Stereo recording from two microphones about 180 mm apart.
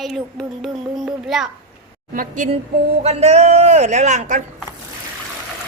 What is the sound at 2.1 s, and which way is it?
Speech, 45° right (ahead or behind).